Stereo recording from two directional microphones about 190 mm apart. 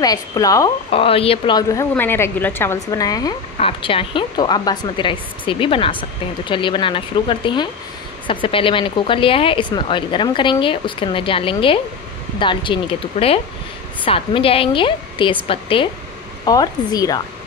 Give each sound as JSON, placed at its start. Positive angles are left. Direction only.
{"t": 0.0, "sound": "speech", "side_deg": 20}
{"t": 0.9, "sound": "speech", "side_deg": 30}